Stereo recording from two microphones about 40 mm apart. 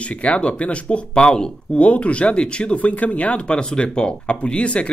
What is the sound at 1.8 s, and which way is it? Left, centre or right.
Speech, left.